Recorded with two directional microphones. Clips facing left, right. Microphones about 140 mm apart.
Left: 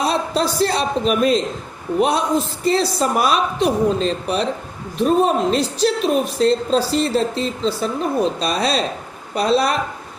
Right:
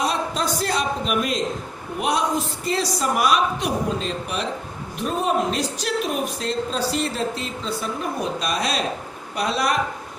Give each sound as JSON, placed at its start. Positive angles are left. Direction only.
{"t": 0.0, "sound": "a man's voice", "side_deg": 30}